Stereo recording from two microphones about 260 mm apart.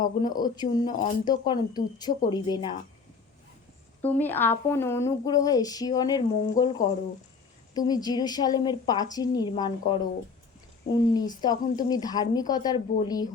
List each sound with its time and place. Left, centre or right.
0.0 s a woman's voice: centre
4.0 s a woman's voice: centre
11.3 s a woman's voice: centre